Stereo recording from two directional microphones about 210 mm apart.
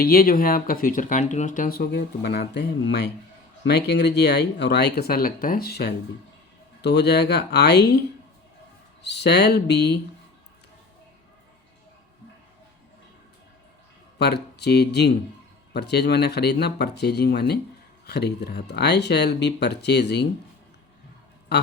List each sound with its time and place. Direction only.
0.0 s speech: 45° left (ahead or behind)
14.2 s speech: 50° left (ahead or behind)